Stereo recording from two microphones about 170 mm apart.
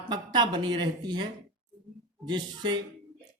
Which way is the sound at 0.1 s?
25° right (ahead or behind).